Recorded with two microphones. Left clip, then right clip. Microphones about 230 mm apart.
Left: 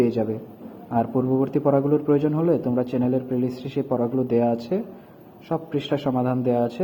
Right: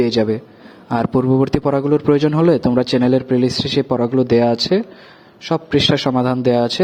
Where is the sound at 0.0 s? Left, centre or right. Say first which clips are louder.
Right 6 dB; right.